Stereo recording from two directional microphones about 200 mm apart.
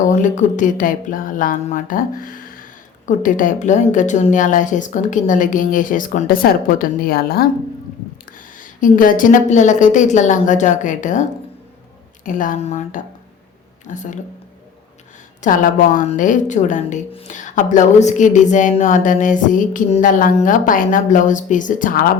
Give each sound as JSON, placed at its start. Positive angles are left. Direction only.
{"t": 0.2, "sound": "a woman's voice", "side_deg": 40}
{"t": 8.5, "sound": "a woman's voice", "side_deg": 40}
{"t": 15.4, "sound": "a woman's voice", "side_deg": 40}